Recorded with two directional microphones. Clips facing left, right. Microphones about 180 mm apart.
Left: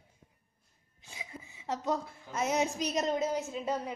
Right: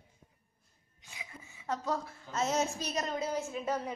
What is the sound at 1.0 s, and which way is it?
A woman's voice, 25° left (ahead or behind).